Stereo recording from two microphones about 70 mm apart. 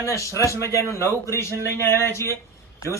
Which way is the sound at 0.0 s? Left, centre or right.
Left.